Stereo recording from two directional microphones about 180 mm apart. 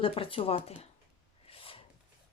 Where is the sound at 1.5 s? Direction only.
30° left (ahead or behind).